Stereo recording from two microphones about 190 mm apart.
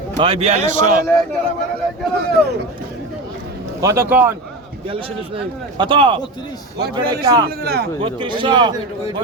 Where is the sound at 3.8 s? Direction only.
15° right (ahead or behind).